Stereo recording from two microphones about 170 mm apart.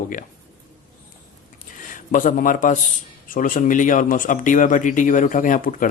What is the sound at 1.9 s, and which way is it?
A man's voice, 50° left (ahead or behind).